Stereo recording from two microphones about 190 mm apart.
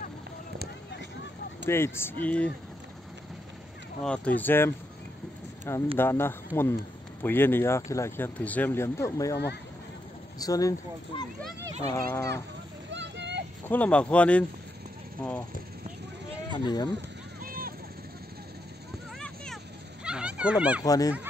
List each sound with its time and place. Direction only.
1.7 s speech: 10° left (ahead or behind)
4.0 s speech: 5° left (ahead or behind)
5.9 s speech: 10° left (ahead or behind)
10.4 s speech: 20° left (ahead or behind)
11.9 s speech: 15° left (ahead or behind)
12.9 s vehicle: 65° right (ahead or behind)
13.7 s speech: 5° left (ahead or behind)
16.5 s speech: 20° left (ahead or behind)
17.4 s vehicle: 50° right (ahead or behind)
19.1 s a sound: 5° left (ahead or behind)
20.8 s speech: 20° left (ahead or behind)